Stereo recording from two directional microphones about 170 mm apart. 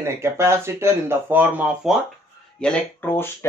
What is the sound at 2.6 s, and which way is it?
Speech, 10° left (ahead or behind).